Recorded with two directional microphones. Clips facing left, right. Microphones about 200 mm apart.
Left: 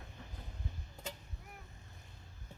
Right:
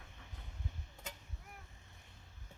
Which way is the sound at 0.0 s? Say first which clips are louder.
Left 5 dB; 35° left (ahead or behind).